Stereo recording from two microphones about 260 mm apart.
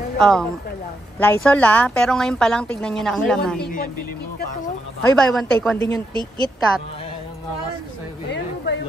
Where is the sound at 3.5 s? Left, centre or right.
Left.